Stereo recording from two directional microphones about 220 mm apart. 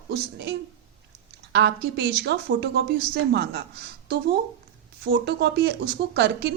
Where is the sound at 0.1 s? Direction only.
50° right (ahead or behind).